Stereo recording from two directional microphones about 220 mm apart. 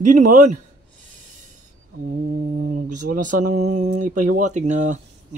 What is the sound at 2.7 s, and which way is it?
Speech, 35° right (ahead or behind).